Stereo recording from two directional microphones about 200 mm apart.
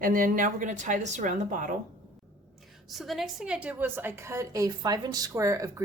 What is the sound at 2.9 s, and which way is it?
A woman's voice, centre (ahead or behind).